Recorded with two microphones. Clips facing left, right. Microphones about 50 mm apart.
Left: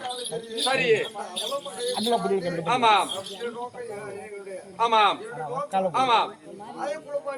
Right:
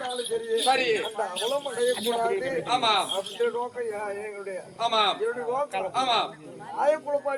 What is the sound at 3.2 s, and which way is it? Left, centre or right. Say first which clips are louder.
Speech: right 6 dB; right.